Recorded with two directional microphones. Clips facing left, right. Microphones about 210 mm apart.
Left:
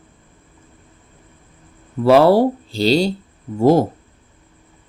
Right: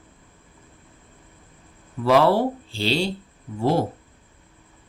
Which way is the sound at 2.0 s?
40° left (ahead or behind).